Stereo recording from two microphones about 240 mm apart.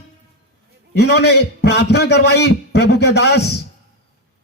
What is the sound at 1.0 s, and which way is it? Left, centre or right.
A man's voice, left.